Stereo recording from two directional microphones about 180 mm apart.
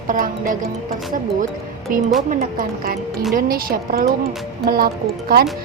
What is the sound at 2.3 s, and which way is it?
Speech, 50° right (ahead or behind).